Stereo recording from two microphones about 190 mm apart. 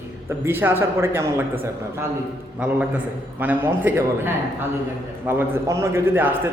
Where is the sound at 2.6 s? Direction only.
5° right (ahead or behind).